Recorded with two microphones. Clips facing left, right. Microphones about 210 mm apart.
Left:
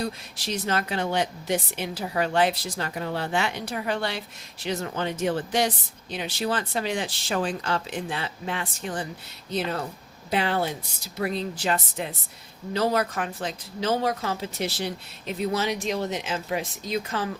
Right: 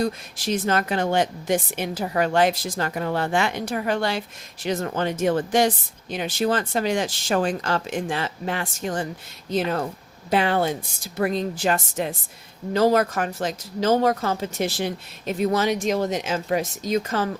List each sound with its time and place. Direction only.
0.0 s speech: 50° right (ahead or behind)
10.2 s speech: 45° right (ahead or behind)